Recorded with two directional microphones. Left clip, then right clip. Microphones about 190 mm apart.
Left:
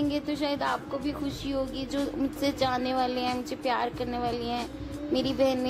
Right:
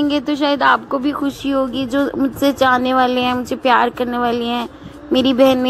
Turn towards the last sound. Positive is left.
turn(degrees=-30)  # may be behind; listen again after turning